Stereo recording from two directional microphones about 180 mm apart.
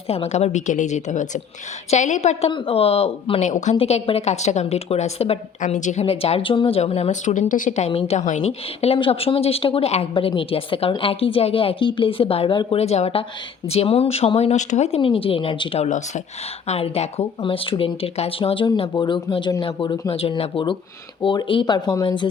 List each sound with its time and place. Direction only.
0.1 s speech: 35° left (ahead or behind)
15.9 s speech: 40° left (ahead or behind); by 22.3 s 25° left (ahead or behind)